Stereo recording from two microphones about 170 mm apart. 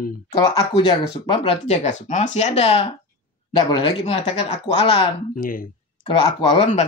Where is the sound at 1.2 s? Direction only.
40° left (ahead or behind).